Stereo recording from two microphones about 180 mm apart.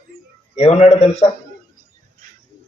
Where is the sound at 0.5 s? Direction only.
35° left (ahead or behind).